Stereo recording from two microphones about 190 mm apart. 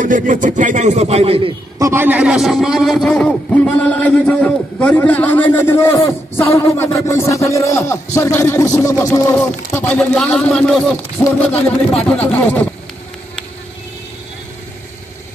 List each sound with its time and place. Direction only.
0.0 s speech: 45° right (ahead or behind)
1.8 s a man's voice: 15° right (ahead or behind); by 12.6 s 5° left (ahead or behind)